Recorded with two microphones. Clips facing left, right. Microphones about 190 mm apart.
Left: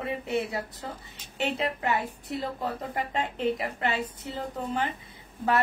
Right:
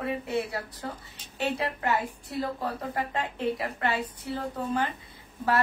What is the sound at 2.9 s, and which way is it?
A woman's voice, 20° left (ahead or behind).